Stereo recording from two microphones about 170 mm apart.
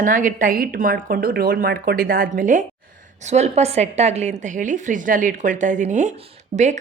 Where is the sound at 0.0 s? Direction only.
50° right (ahead or behind).